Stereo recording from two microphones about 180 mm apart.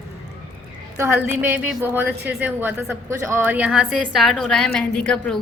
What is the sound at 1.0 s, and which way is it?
A woman's voice, 10° right (ahead or behind).